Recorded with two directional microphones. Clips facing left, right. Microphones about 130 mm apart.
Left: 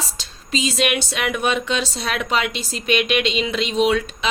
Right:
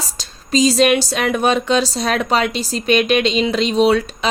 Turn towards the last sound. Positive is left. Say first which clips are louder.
# right 4 dB
turn(degrees=-35)  # may be behind; listen again after turning